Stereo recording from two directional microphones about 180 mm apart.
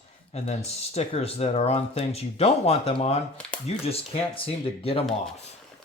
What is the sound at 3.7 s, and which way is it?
Speech, 35° left (ahead or behind).